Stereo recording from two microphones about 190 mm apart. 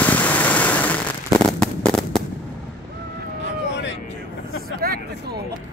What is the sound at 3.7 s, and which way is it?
Vehicle, 70° left (ahead or behind).